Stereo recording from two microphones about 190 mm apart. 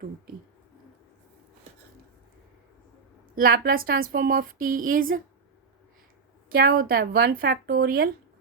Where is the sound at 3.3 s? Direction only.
50° right (ahead or behind).